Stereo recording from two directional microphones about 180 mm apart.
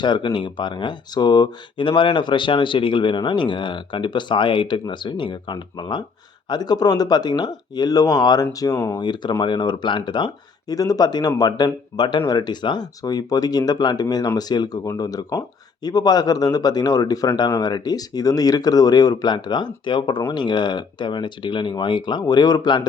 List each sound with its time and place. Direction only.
0.0 s speech: 25° left (ahead or behind)